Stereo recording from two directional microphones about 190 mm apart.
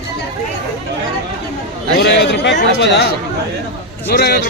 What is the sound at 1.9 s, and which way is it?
A man's voice, 60° left (ahead or behind).